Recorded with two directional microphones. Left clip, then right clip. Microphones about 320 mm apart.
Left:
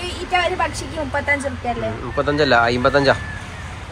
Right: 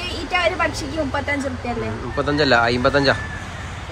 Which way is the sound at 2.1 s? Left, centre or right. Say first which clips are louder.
Left 1 dB; centre.